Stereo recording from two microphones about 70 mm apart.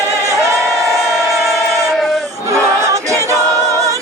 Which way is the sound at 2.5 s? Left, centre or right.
Right.